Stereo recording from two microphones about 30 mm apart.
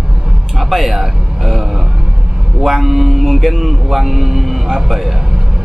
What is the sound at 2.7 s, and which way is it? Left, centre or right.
Speech, centre.